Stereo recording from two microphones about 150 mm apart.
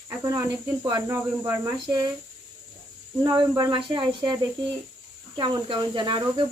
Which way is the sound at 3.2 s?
30° right (ahead or behind).